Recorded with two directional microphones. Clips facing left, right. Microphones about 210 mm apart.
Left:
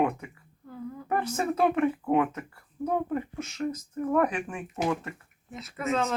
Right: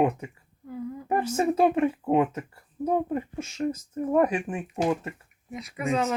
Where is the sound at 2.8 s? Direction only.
20° right (ahead or behind).